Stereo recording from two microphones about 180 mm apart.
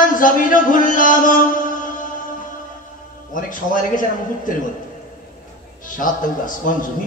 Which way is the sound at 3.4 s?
45° left (ahead or behind).